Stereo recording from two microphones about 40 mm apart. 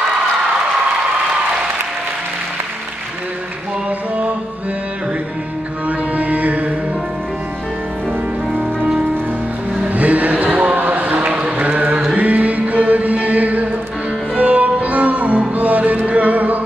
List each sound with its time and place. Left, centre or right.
5.9 s music: right
9.8 s music: right
10.8 s a sound: right
11.2 s a sound: right
11.5 s mantra: right
12.2 s music: right